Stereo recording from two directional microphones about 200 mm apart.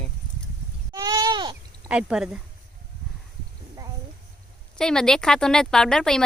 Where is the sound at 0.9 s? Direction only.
20° right (ahead or behind).